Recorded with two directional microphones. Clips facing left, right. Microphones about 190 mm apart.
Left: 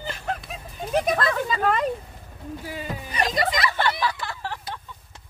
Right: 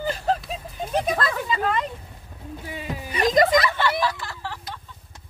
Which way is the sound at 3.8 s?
60° left (ahead or behind).